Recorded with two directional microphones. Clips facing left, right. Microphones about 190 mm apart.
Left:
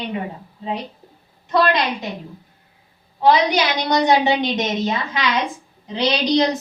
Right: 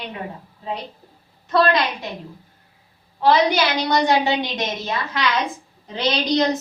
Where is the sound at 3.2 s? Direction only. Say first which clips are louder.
Left 1 dB; 20° left (ahead or behind).